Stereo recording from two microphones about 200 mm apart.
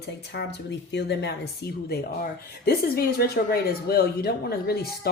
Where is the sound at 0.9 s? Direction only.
55° left (ahead or behind).